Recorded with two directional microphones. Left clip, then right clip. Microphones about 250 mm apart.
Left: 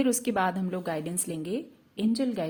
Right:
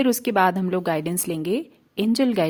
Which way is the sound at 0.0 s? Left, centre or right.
Right.